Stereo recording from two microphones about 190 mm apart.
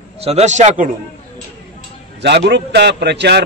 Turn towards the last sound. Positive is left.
turn(degrees=-60)  # may be behind; listen again after turning